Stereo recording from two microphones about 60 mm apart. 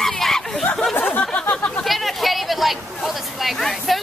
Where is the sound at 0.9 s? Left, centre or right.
Left.